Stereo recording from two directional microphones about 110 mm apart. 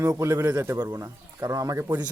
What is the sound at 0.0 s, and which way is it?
Speech, 25° right (ahead or behind).